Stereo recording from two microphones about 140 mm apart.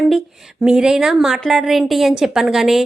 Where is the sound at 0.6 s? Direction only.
5° right (ahead or behind).